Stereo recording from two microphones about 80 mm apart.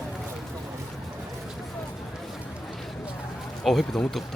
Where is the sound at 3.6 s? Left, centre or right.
Centre.